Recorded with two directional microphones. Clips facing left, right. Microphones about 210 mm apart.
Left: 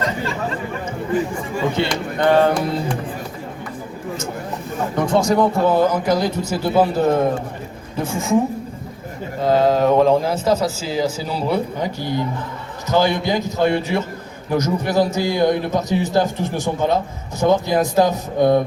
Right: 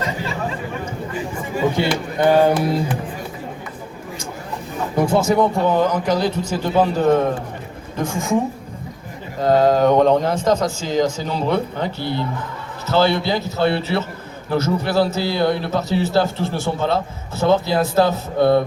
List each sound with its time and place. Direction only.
1.5 s speech: 10° right (ahead or behind)
4.9 s a man's voice: 5° right (ahead or behind)
9.4 s a man's voice: centre (ahead or behind)